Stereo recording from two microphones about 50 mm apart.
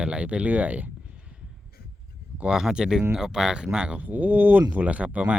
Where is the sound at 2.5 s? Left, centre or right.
Centre.